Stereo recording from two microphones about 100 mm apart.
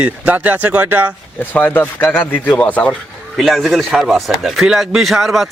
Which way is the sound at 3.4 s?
Centre (ahead or behind).